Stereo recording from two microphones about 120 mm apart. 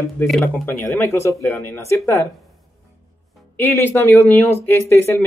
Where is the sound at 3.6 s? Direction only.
15° left (ahead or behind).